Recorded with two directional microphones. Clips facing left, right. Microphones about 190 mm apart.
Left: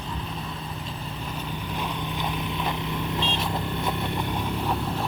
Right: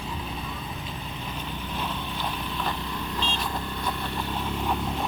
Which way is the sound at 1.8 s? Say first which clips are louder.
Left 2 dB; 15° left (ahead or behind).